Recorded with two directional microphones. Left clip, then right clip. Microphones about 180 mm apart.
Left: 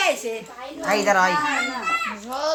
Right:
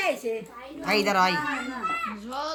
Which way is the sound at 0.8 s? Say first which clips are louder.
Left 4 dB; 55° right (ahead or behind).